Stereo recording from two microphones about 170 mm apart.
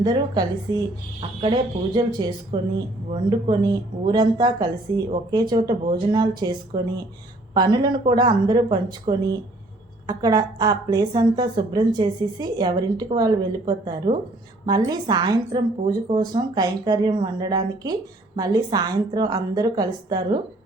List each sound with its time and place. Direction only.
0.0 s a woman's voice: 25° right (ahead or behind)
7.5 s a woman's voice: 25° right (ahead or behind)